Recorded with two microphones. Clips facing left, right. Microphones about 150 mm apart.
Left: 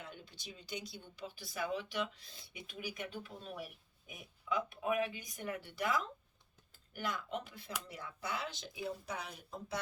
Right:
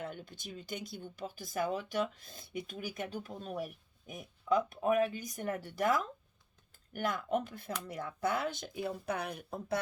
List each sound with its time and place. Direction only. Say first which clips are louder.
0.0 s speech: right 8 dB; 50° right (ahead or behind)